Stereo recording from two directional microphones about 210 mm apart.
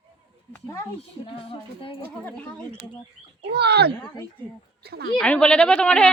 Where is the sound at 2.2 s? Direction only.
5° left (ahead or behind).